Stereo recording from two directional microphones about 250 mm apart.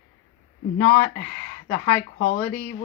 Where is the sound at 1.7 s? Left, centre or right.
Left.